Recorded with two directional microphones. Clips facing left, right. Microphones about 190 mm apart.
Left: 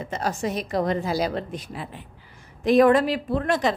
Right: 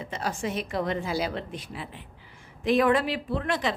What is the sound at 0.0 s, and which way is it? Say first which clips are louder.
A woman's voice: left 4 dB; 45° left (ahead or behind).